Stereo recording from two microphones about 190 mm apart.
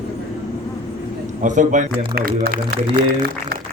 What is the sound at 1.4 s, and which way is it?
Speech, 40° right (ahead or behind).